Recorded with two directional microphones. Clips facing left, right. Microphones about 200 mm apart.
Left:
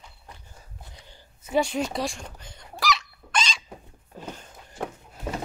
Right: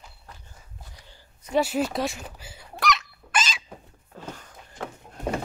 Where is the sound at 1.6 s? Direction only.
5° right (ahead or behind).